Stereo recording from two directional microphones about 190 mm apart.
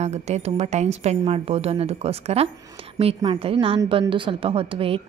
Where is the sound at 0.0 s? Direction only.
35° right (ahead or behind).